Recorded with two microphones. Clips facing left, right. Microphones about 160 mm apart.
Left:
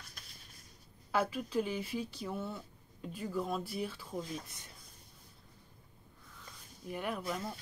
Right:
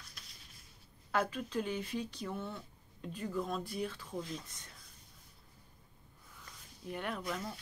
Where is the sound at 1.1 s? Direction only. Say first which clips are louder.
Left 2 dB; 10° left (ahead or behind).